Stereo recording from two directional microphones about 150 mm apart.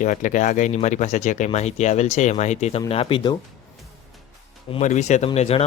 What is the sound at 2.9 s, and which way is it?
Speech, 35° left (ahead or behind).